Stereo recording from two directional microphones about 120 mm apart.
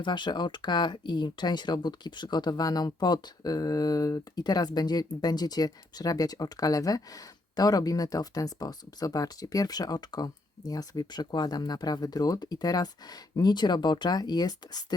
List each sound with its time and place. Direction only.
0.0 s speech: 40° left (ahead or behind)